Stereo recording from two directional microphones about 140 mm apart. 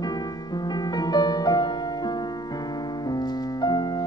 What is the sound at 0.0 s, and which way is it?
Music, 30° left (ahead or behind).